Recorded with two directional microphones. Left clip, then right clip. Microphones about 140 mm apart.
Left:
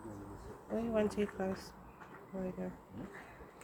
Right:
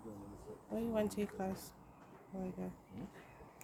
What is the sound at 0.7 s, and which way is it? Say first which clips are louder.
Speech: left 3 dB; 20° right (ahead or behind).